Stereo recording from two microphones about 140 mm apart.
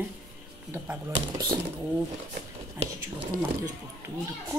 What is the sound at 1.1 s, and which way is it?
Speech, 25° right (ahead or behind).